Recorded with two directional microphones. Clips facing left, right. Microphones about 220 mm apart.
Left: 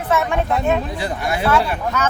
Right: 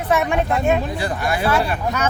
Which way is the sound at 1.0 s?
25° left (ahead or behind).